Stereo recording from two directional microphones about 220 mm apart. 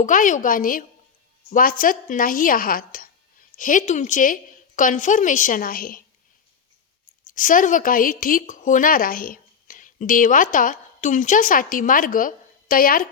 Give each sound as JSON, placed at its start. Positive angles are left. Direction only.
{"t": 0.0, "sound": "a woman's voice", "side_deg": 35}
{"t": 7.3, "sound": "a woman's voice", "side_deg": 35}